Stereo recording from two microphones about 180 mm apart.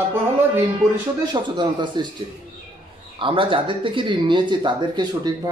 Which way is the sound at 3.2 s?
30° right (ahead or behind).